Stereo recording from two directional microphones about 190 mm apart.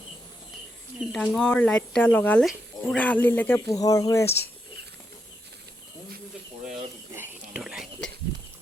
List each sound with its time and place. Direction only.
0.9 s speech: 5° left (ahead or behind)
7.1 s whispering: 10° right (ahead or behind)